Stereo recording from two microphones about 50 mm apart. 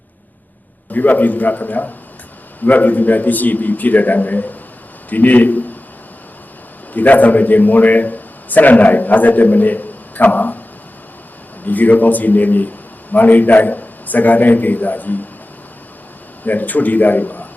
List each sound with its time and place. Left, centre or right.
0.9 s a man's voice: left
6.9 s a man's voice: left
11.6 s a man's voice: left
16.5 s a man's voice: left